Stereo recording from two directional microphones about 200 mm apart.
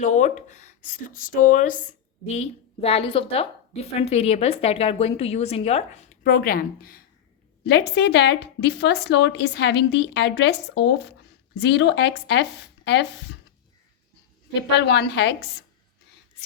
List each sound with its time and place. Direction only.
0.0 s a woman's voice: 35° left (ahead or behind); by 13.1 s 60° left (ahead or behind)
14.8 s a woman's voice: 60° left (ahead or behind)